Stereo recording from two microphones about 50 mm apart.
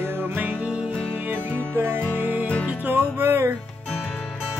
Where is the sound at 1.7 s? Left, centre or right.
Right.